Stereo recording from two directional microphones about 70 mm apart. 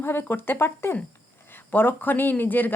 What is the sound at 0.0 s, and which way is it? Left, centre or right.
Speech, left.